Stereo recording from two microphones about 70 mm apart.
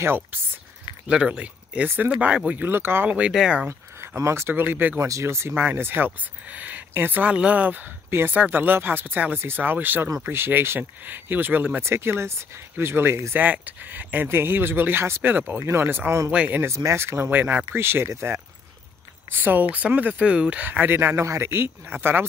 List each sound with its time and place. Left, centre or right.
0.0 s speech: right
1.0 s speech: centre
2.6 s speech: right
3.1 s speech: centre
3.6 s speech: right
5.0 s speech: right
5.5 s speech: right
13.4 s speech: right
16.6 s speech: right
17.3 s speech: right
19.3 s speech: right